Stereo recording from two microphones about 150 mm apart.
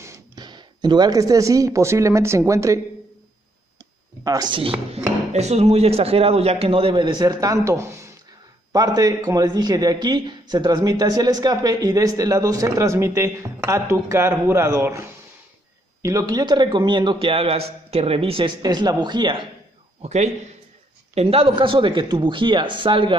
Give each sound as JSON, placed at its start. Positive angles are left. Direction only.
{"t": 0.0, "sound": "speech", "side_deg": -25}
{"t": 4.2, "sound": "a man's voice", "side_deg": -25}
{"t": 18.6, "sound": "a man's voice", "side_deg": -25}
{"t": 20.0, "sound": "a man's voice", "side_deg": -50}